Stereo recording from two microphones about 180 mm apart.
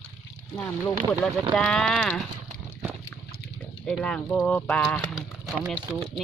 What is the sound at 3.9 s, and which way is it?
Speech, 5° left (ahead or behind).